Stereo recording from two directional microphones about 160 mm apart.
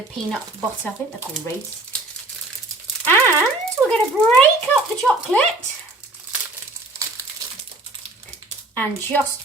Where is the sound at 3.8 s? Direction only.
5° left (ahead or behind).